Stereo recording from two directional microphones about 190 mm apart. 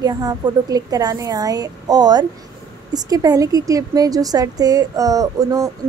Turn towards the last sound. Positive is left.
turn(degrees=-20)  # may be behind; listen again after turning